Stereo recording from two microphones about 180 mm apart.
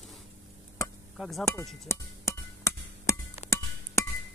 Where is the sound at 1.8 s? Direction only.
15° left (ahead or behind).